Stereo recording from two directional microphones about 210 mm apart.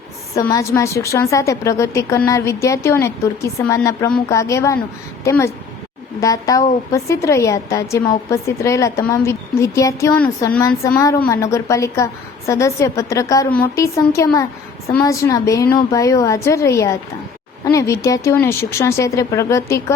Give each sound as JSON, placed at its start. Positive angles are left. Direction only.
{"t": 0.3, "sound": "a woman's voice", "side_deg": 15}